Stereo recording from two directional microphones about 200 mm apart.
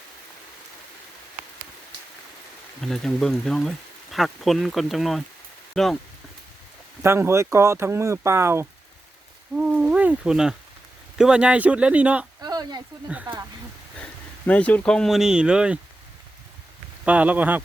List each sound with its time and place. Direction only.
2.8 s speech: centre (ahead or behind)
7.0 s speech: 10° right (ahead or behind)
12.4 s a sound: 20° right (ahead or behind)
13.1 s speech: 5° right (ahead or behind)
14.0 s speech: 5° left (ahead or behind)
17.1 s speech: 5° right (ahead or behind)